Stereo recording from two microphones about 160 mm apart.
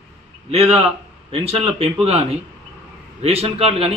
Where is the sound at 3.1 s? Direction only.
40° right (ahead or behind).